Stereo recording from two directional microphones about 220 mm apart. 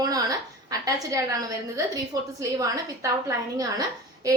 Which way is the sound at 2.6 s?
15° right (ahead or behind).